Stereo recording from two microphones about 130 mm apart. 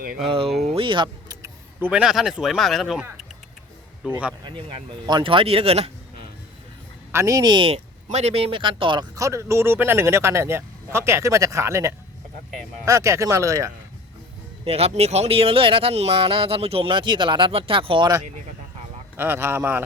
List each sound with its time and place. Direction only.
0.3 s speech: 45° right (ahead or behind)
1.4 s speech: 10° right (ahead or behind)
4.4 s speech: 40° right (ahead or behind)
7.1 s speech: 20° right (ahead or behind); by 9.0 s 40° right (ahead or behind)
9.1 s a man's voice: 25° right (ahead or behind)
14.6 s speech: 50° right (ahead or behind)
19.1 s speech: 15° right (ahead or behind)